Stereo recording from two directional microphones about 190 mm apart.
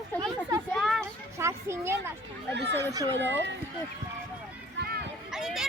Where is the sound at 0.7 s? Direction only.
Centre (ahead or behind).